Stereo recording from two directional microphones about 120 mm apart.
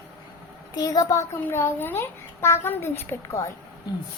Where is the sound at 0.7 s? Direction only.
30° left (ahead or behind).